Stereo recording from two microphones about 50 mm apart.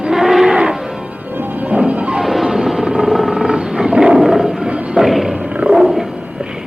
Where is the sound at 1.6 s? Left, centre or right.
Right.